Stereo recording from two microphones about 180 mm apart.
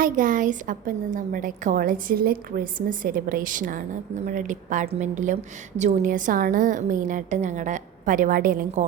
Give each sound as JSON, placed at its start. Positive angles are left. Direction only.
{"t": 0.0, "sound": "a woman's voice", "side_deg": -50}